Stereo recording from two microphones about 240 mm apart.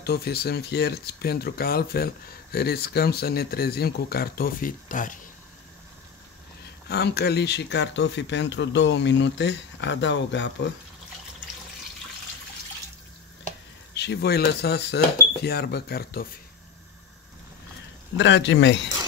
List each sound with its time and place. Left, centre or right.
0.0 s speech: left
6.9 s speech: left
13.9 s speech: left
18.1 s speech: left